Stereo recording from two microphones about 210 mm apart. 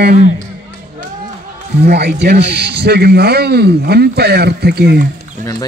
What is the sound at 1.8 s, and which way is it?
A man's voice, 50° right (ahead or behind).